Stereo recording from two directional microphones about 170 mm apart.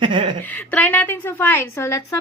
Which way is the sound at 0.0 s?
30° right (ahead or behind).